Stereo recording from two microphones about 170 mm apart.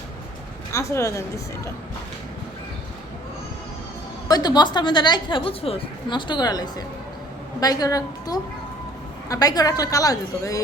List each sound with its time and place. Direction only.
0.7 s speech: 15° left (ahead or behind)
4.3 s a woman's voice: 25° left (ahead or behind)